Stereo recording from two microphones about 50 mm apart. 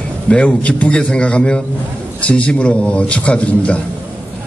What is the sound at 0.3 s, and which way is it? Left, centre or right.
A man's voice, left.